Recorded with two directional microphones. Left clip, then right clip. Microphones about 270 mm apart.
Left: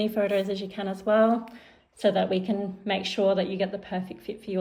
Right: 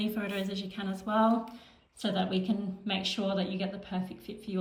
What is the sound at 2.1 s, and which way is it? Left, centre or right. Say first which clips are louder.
Speech: left 8 dB; right.